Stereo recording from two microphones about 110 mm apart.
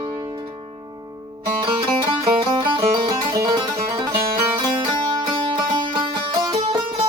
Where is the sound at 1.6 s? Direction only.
45° right (ahead or behind).